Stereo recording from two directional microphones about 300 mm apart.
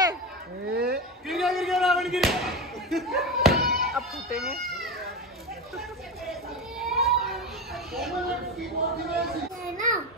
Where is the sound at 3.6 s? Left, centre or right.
Centre.